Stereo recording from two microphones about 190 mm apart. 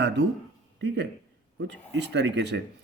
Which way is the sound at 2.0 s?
65° right (ahead or behind).